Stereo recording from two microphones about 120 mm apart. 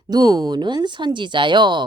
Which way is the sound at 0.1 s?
35° right (ahead or behind).